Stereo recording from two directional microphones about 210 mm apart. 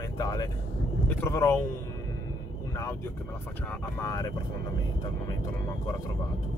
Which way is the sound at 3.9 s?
15° left (ahead or behind).